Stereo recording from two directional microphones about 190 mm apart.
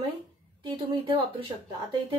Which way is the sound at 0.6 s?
30° right (ahead or behind).